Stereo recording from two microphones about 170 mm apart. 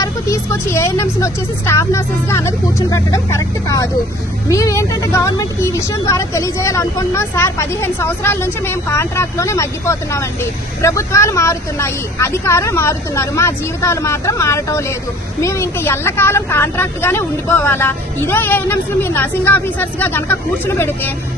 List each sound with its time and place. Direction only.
0.0 s a woman's voice: 15° left (ahead or behind)